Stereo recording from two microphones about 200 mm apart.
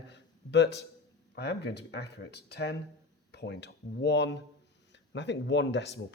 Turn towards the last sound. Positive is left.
turn(degrees=60)  # may be behind; listen again after turning